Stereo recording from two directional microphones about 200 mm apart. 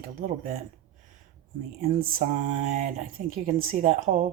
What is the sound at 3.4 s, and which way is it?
Mantra, 40° right (ahead or behind).